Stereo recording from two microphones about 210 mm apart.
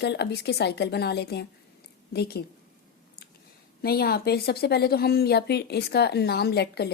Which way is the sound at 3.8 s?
45° left (ahead or behind).